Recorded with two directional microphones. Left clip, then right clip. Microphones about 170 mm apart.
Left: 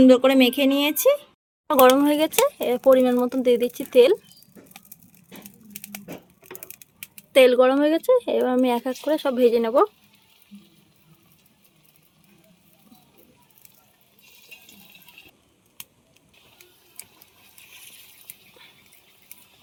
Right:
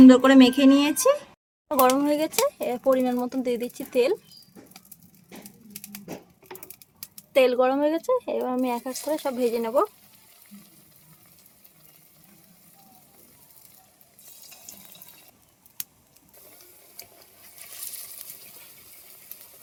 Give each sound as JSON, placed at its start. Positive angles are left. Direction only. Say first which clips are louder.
{"t": 0.0, "sound": "speech", "louder": "right 1 dB", "side_deg": 20}
{"t": 7.3, "sound": "speech", "louder": "left 5 dB", "side_deg": 30}